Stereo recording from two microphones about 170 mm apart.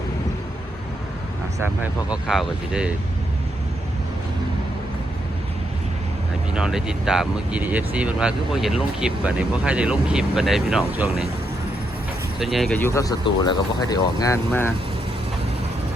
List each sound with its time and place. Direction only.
1.8 s speech: 5° right (ahead or behind)
6.5 s speech: 5° right (ahead or behind)
12.4 s speech: centre (ahead or behind)
12.9 s speech: 20° left (ahead or behind)